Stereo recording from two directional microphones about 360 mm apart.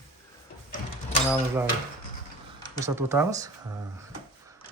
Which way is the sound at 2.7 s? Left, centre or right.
Centre.